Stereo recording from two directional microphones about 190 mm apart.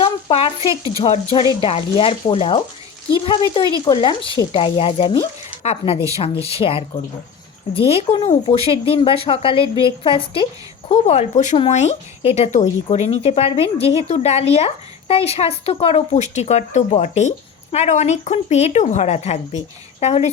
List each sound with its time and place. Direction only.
0.0 s speech: 30° left (ahead or behind)